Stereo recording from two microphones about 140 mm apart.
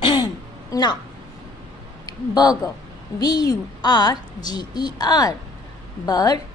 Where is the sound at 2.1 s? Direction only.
30° left (ahead or behind).